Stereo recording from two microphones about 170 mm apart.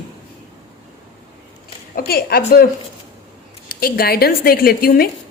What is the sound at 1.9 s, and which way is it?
Speech, 65° left (ahead or behind).